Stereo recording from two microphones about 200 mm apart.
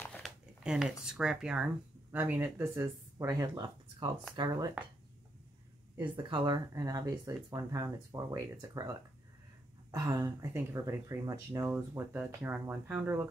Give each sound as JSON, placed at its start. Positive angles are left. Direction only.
{"t": 0.0, "sound": "speech", "side_deg": 0}
{"t": 5.9, "sound": "speech", "side_deg": -25}